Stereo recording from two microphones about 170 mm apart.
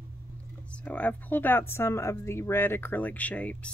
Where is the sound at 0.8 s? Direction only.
10° left (ahead or behind).